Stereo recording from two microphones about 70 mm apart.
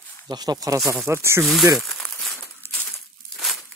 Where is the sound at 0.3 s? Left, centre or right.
Right.